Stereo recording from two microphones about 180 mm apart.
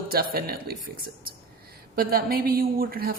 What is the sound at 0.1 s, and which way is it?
A woman's voice, 55° right (ahead or behind).